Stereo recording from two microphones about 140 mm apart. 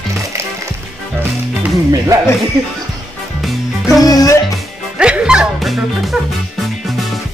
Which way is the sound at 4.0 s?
25° left (ahead or behind).